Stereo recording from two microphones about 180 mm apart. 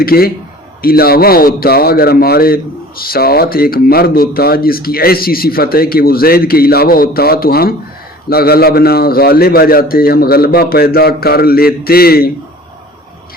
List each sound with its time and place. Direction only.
0.0 s speech: 55° left (ahead or behind)